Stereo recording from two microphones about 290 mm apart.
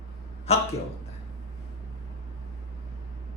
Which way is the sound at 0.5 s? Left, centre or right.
Left.